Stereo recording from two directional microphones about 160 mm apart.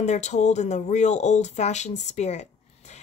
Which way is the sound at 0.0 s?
45° left (ahead or behind).